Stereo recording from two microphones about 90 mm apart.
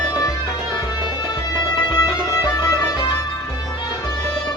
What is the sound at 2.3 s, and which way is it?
Music, 40° left (ahead or behind).